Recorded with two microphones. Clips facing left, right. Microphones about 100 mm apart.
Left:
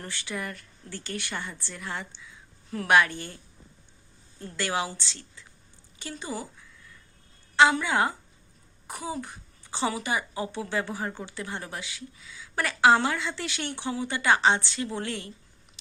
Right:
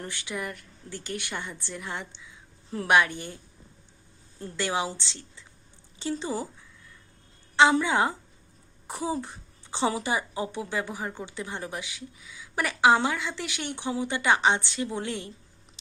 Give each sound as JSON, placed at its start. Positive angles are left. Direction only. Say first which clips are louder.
{"t": 0.0, "sound": "a woman's voice", "louder": "right 1 dB", "side_deg": -15}
{"t": 4.4, "sound": "a woman's voice", "louder": "right 1 dB", "side_deg": -20}
{"t": 7.5, "sound": "a woman's voice", "louder": "right 1 dB", "side_deg": -20}